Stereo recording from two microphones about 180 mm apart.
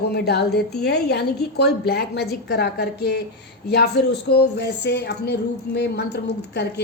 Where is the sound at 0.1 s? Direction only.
65° left (ahead or behind).